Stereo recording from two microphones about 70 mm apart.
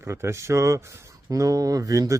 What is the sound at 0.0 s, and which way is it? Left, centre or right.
A man's voice, right.